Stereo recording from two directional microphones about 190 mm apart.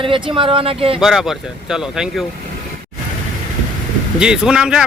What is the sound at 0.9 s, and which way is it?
Speech, centre (ahead or behind).